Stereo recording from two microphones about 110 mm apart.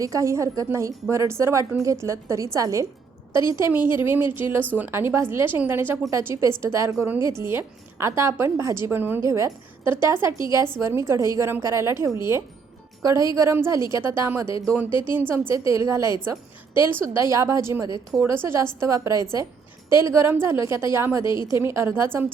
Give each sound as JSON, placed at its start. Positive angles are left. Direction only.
{"t": 0.0, "sound": "a woman's voice", "side_deg": -30}
{"t": 3.8, "sound": "speech", "side_deg": 45}
{"t": 4.0, "sound": "a woman's voice", "side_deg": -20}
{"t": 14.8, "sound": "speech", "side_deg": 50}
{"t": 15.1, "sound": "a woman's voice", "side_deg": -20}